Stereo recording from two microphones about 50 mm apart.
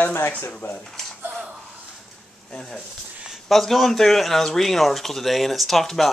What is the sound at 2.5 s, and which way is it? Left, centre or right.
Speech, centre.